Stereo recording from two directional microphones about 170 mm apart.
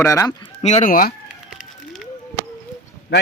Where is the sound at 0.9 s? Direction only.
60° left (ahead or behind).